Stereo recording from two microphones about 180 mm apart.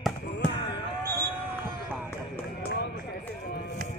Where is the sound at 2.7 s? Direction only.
70° left (ahead or behind).